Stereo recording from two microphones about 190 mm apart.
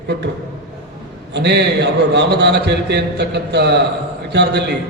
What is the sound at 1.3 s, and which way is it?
A man's voice, 60° right (ahead or behind).